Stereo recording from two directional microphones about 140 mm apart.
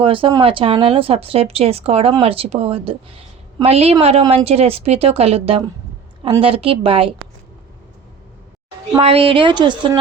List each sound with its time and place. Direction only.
0.0 s a woman's voice: 40° right (ahead or behind)
8.9 s a woman's voice: 45° right (ahead or behind)